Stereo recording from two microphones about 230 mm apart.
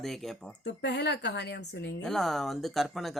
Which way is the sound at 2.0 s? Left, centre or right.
Centre.